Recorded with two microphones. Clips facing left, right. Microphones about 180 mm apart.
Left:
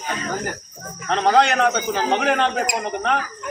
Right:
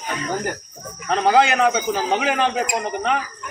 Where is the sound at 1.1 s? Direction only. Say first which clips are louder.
Even; 5° right (ahead or behind).